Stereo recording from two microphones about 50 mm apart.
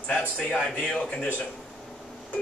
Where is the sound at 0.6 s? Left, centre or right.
Centre.